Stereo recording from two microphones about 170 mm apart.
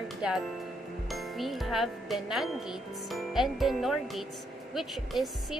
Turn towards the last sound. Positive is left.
turn(degrees=0)  # may be behind; listen again after turning